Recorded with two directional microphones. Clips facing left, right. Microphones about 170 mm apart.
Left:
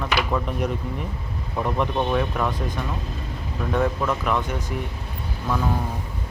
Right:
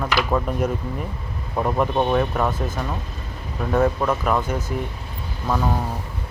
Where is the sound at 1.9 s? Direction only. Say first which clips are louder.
Right 3 dB; 35° right (ahead or behind).